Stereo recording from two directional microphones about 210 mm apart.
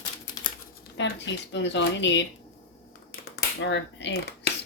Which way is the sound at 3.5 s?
60° left (ahead or behind).